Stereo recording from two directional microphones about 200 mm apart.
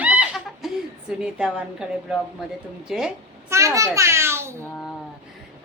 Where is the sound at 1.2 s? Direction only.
5° right (ahead or behind).